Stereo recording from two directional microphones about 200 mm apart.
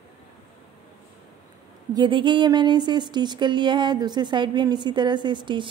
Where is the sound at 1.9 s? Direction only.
25° right (ahead or behind).